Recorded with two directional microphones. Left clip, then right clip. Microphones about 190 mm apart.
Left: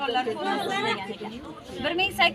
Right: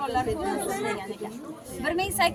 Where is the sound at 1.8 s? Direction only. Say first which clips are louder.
Left 2 dB; 15° right (ahead or behind).